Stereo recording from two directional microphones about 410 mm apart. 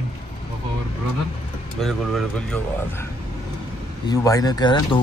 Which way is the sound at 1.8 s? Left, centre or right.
Centre.